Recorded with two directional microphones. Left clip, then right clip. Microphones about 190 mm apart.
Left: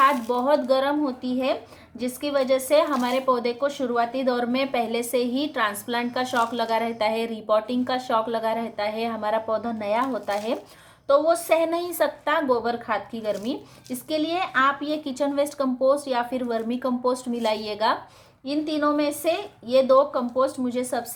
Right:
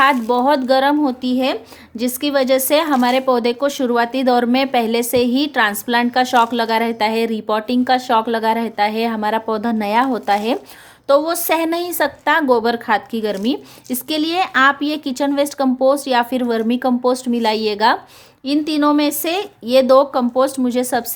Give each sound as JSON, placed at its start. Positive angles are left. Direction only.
{"t": 0.0, "sound": "a woman's voice", "side_deg": -50}